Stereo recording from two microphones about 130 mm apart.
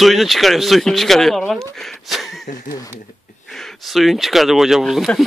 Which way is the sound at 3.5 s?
Centre (ahead or behind).